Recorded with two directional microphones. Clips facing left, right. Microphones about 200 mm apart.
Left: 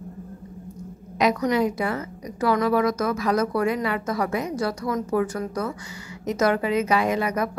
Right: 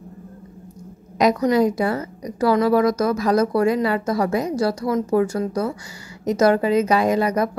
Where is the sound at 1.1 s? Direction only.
35° right (ahead or behind).